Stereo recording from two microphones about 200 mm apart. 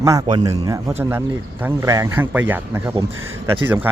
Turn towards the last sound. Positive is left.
turn(degrees=-10)  # may be behind; listen again after turning